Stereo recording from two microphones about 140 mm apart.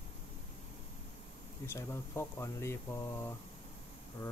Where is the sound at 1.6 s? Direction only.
20° left (ahead or behind).